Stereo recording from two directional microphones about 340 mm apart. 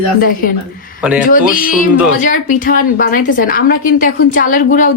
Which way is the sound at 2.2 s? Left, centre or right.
Left.